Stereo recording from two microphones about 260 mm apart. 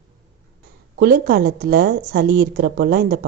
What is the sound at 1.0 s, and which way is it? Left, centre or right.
A woman's voice, right.